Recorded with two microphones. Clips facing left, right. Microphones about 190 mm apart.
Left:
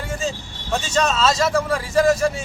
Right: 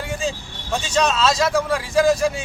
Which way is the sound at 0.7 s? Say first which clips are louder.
Even; 5° left (ahead or behind).